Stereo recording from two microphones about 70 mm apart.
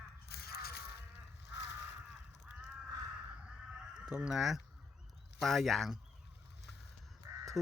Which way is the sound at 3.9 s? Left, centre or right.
Centre.